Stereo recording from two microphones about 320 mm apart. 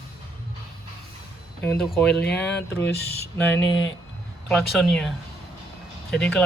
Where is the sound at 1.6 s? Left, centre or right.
Centre.